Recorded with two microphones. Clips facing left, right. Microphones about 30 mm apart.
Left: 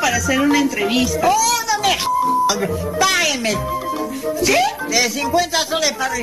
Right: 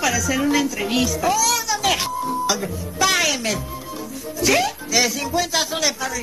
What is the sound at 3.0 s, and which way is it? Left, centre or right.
Speech, centre.